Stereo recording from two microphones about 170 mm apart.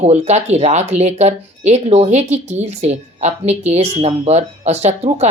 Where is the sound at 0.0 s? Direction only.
40° right (ahead or behind).